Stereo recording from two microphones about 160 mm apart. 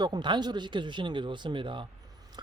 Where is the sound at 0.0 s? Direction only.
30° right (ahead or behind).